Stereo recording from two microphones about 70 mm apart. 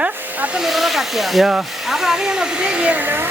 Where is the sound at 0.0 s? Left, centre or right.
Centre.